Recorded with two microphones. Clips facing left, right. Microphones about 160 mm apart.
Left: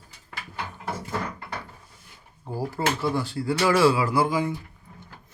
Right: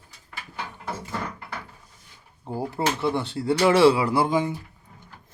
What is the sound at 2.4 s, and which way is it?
Speech, 25° right (ahead or behind).